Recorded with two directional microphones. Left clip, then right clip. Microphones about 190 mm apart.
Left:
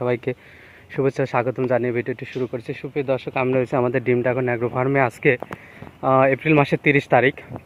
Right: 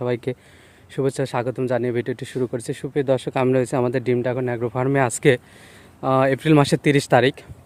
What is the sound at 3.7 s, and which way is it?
Speech, 30° right (ahead or behind).